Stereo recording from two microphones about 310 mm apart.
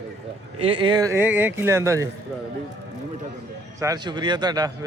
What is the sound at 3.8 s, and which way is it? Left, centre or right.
Speech, centre.